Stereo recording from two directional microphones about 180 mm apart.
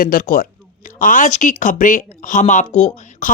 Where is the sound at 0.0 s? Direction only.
50° left (ahead or behind).